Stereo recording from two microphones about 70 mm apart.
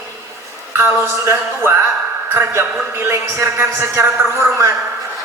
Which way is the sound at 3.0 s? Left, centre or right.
Right.